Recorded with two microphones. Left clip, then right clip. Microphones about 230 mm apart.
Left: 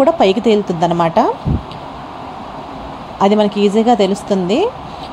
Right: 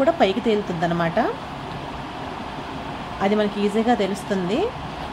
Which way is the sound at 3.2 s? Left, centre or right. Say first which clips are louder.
Left 9 dB; left.